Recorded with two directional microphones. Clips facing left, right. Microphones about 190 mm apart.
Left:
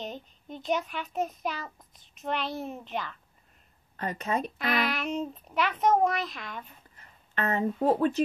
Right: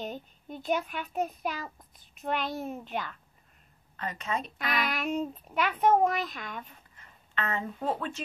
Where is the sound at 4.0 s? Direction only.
40° left (ahead or behind).